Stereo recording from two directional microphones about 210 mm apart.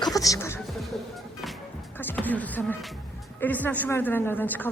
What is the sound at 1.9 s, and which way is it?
A woman's voice, 10° left (ahead or behind).